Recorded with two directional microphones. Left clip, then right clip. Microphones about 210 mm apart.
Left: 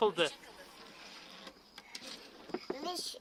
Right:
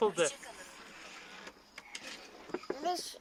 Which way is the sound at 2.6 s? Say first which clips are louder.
Right 6 dB; 35° left (ahead or behind).